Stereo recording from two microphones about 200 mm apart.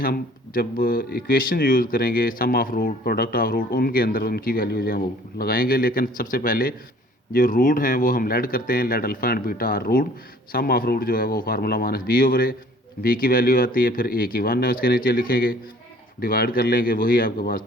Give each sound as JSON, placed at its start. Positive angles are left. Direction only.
{"t": 0.0, "sound": "speech", "side_deg": 45}